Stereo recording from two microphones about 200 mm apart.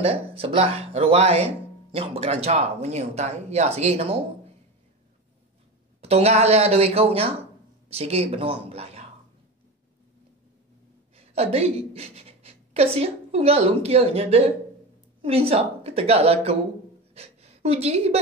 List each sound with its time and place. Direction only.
0.0 s speech: 30° right (ahead or behind)
5.9 s speech: 30° right (ahead or behind)
11.1 s a woman's voice: 30° right (ahead or behind)
17.1 s a sound: 30° right (ahead or behind)